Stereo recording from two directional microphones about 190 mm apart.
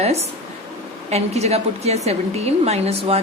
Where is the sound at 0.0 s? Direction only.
35° right (ahead or behind).